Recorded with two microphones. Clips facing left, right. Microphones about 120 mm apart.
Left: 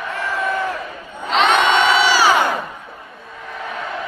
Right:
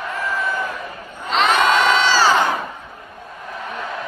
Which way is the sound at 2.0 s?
15° left (ahead or behind).